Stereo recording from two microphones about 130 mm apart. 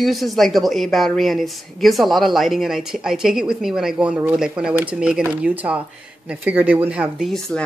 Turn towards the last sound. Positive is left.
turn(degrees=0)  # may be behind; listen again after turning